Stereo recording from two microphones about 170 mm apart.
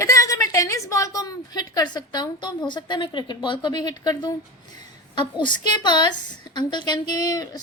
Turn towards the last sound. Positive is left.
turn(degrees=20)  # may be behind; listen again after turning